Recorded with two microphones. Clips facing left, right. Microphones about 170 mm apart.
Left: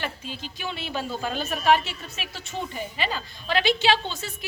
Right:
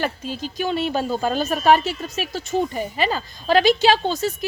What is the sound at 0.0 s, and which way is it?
A woman's voice, 40° right (ahead or behind).